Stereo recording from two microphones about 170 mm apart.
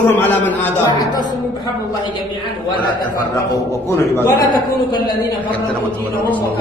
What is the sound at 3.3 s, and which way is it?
Speech, 15° left (ahead or behind).